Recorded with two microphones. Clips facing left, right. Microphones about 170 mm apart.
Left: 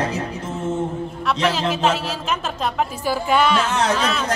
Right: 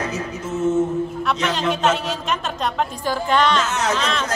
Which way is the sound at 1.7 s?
Centre (ahead or behind).